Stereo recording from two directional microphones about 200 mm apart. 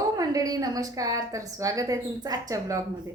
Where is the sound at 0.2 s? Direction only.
20° right (ahead or behind).